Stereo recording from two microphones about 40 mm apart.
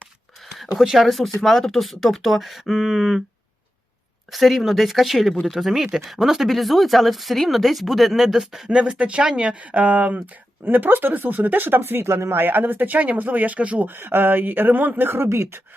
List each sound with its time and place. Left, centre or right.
0.4 s a sound: centre
0.8 s speech: centre
4.3 s speech: centre
8.7 s speech: right
9.6 s speech: right
10.7 s speech: right
13.8 s speech: right